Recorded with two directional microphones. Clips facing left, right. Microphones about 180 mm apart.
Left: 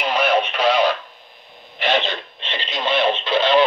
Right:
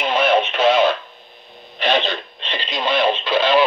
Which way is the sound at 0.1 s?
25° right (ahead or behind).